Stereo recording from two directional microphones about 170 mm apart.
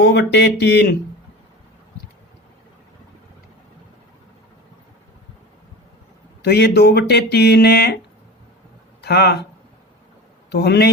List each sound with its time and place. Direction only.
0.0 s speech: 80° left
6.4 s speech: 70° left (ahead or behind)
9.0 s speech: 70° left (ahead or behind)
10.5 s speech: 75° left (ahead or behind)